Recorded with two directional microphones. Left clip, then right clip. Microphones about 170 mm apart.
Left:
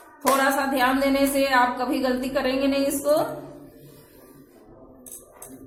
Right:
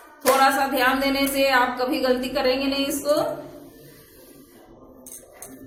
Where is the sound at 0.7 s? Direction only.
20° left (ahead or behind).